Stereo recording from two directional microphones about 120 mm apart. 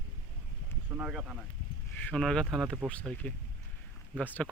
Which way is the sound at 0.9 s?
15° right (ahead or behind).